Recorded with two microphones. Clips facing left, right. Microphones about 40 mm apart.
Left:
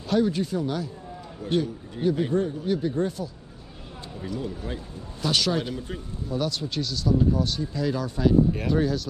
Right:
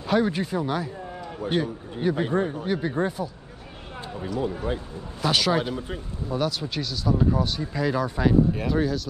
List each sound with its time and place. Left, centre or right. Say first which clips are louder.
0.0 s a man's voice: even; right
4.4 s a man's voice: right 8 dB; right
5.2 s speech: right 2 dB; centre
8.5 s speech: even; centre